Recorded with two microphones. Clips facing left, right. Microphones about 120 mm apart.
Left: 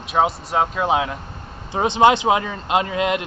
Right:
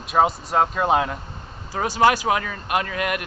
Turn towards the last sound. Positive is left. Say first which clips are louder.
# left 4 dB
turn(degrees=20)  # may be behind; listen again after turning